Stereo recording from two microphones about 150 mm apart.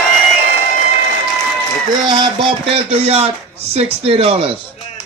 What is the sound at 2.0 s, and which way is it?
Speech, 30° right (ahead or behind).